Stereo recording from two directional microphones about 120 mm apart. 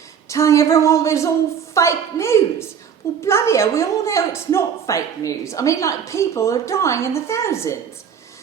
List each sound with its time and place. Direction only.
0.3 s a woman's voice: 25° left (ahead or behind)